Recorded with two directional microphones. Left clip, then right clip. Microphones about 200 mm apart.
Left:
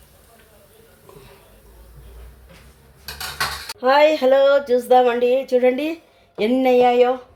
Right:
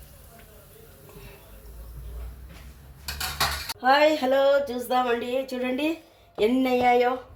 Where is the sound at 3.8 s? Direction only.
35° left (ahead or behind).